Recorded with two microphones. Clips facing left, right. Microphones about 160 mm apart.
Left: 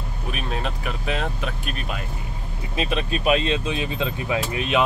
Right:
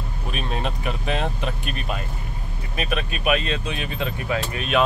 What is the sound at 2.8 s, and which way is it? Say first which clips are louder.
Speech: left 2 dB; 25° left (ahead or behind).